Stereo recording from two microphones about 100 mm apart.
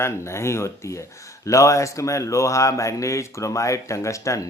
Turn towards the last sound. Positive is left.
turn(degrees=30)  # may be behind; listen again after turning